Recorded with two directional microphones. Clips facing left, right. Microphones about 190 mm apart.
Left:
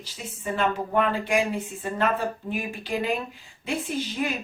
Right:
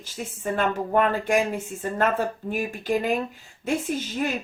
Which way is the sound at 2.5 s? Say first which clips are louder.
Right 4 dB; 45° right (ahead or behind).